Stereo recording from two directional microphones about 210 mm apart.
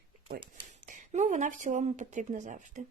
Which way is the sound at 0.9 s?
35° right (ahead or behind).